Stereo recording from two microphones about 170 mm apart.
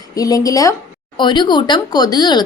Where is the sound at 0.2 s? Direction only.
20° left (ahead or behind).